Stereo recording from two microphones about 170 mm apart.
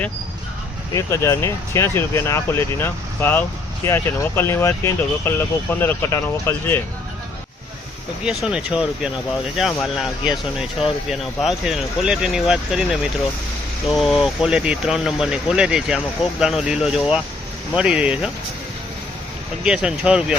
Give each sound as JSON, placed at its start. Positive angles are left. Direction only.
{"t": 0.9, "sound": "speech", "side_deg": 15}
{"t": 8.2, "sound": "speech", "side_deg": -5}
{"t": 19.6, "sound": "speech", "side_deg": -5}